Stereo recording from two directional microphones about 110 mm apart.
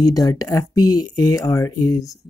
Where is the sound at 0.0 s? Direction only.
35° left (ahead or behind).